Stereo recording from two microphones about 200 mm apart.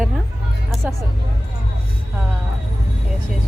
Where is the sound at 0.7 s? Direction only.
Centre (ahead or behind).